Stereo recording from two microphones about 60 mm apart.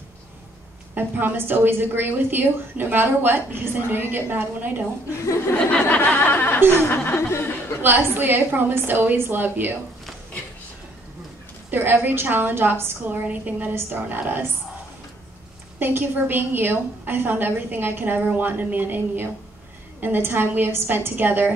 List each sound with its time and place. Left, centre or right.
0.9 s a woman's voice: right
5.7 s speech: left
7.2 s speech: left
7.8 s a woman's voice: right
11.7 s a woman's voice: right
13.1 s a woman's voice: right
15.8 s a woman's voice: right